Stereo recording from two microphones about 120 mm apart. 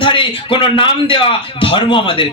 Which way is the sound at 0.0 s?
45° left (ahead or behind).